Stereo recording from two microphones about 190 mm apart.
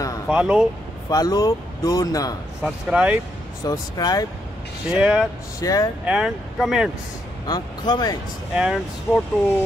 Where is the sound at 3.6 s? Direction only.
20° left (ahead or behind).